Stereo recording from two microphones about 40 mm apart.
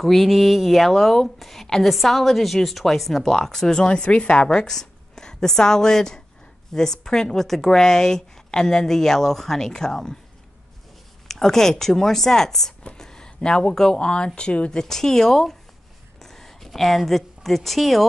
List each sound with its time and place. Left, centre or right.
0.0 s speech: centre; by 4.5 s left
4.5 s a woman's voice: centre
11.2 s speech: centre; by 14.8 s left
14.8 s speech: centre